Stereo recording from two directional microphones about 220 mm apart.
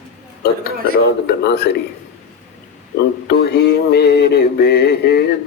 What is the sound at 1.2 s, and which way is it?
Mantra, 50° left (ahead or behind).